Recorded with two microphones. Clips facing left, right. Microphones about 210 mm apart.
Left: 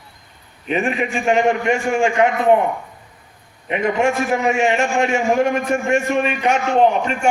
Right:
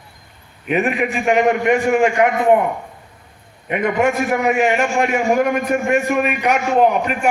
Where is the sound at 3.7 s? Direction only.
25° left (ahead or behind).